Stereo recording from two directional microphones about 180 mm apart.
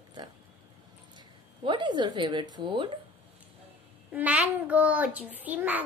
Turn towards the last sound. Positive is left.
turn(degrees=-10)  # may be behind; listen again after turning